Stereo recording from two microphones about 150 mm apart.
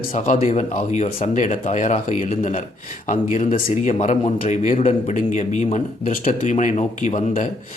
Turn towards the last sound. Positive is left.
turn(degrees=55)  # may be behind; listen again after turning